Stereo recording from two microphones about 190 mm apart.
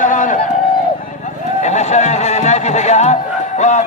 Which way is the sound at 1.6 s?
35° left (ahead or behind).